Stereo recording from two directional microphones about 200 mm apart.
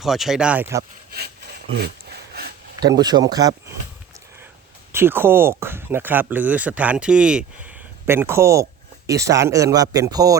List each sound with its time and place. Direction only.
0.0 s speech: centre (ahead or behind)
2.8 s speech: 20° right (ahead or behind)
4.9 s speech: 10° right (ahead or behind)